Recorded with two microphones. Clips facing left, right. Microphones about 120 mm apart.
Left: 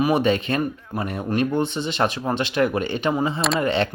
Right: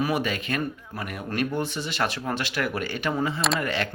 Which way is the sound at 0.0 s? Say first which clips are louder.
Left 7 dB; 25° left (ahead or behind).